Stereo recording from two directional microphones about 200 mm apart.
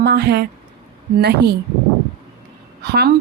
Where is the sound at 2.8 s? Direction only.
55° right (ahead or behind).